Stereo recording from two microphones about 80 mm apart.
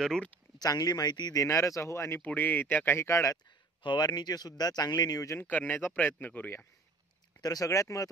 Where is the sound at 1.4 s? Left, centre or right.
Left.